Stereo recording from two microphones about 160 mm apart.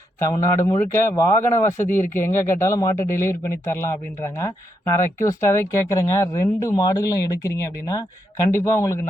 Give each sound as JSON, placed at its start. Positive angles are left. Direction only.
{"t": 0.2, "sound": "speech", "side_deg": 20}